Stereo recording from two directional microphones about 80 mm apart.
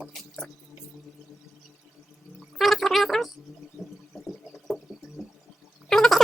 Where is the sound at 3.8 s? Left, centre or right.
Centre.